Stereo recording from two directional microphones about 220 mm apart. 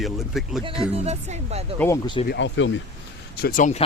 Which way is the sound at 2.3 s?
55° left (ahead or behind).